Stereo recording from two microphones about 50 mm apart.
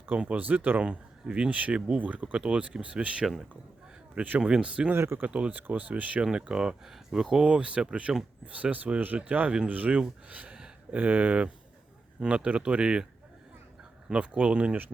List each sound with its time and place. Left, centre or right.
0.2 s speech: right
0.8 s speech: right
4.9 s speech: right
5.2 s speech: right
5.5 s speech: right
6.2 s speech: centre
7.4 s speech: right
8.5 s speech: right
14.1 s speech: right